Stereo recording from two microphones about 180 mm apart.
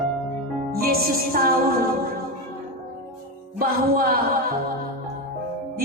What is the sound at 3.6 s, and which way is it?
Mantra, 55° right (ahead or behind).